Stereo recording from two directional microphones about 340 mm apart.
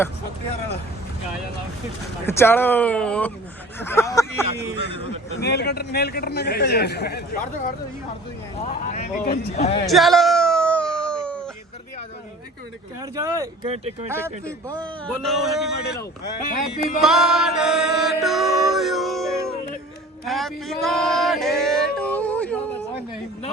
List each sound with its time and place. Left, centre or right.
2.2 s speech: centre
5.4 s speech: left
9.8 s a sound: centre
13.0 s speech: centre
14.1 s speech: centre
17.0 s music: centre
20.2 s speech: centre
21.9 s a sound: centre